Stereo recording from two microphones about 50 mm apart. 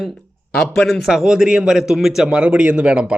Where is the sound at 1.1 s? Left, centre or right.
Centre.